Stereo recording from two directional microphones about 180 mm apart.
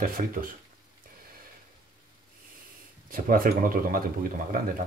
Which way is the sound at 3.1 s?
50° right (ahead or behind).